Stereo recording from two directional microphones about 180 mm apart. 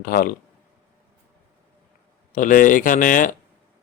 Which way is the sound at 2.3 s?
45° left (ahead or behind).